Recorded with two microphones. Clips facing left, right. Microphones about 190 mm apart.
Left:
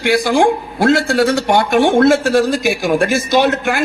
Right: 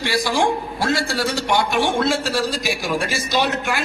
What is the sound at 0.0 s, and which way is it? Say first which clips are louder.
A man's voice: left 7 dB; 60° left (ahead or behind).